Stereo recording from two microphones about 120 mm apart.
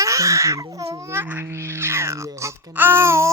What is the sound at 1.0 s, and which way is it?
Baby cry, 20° right (ahead or behind).